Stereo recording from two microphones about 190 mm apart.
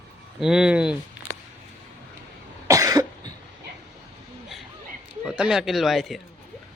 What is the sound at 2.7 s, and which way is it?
Cough, 20° right (ahead or behind).